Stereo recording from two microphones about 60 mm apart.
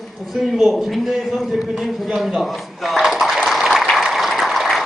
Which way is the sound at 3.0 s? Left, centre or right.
Centre.